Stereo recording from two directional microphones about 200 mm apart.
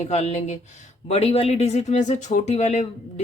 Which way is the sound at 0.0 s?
35° left (ahead or behind).